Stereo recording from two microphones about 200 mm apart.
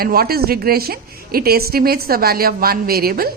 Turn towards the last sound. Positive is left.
turn(degrees=-50)  # may be behind; listen again after turning